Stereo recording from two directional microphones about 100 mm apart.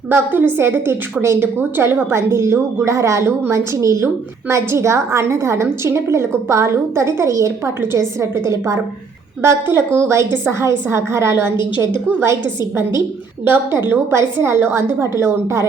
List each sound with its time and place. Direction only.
0.1 s a woman's voice: 20° right (ahead or behind)